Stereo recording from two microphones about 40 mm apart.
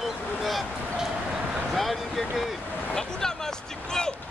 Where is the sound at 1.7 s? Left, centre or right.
Centre.